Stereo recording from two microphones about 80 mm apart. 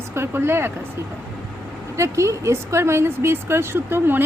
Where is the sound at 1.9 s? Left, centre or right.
Right.